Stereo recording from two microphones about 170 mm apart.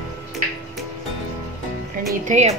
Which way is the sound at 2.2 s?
45° right (ahead or behind).